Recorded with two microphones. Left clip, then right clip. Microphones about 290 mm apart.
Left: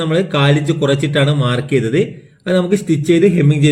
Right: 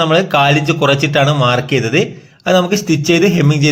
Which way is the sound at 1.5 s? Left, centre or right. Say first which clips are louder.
Right 2 dB; right.